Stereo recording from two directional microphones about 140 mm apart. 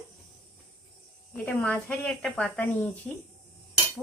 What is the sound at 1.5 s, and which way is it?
A woman's voice, 10° left (ahead or behind).